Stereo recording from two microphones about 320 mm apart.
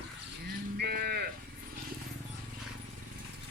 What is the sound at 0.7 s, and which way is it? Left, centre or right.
Livestock, right.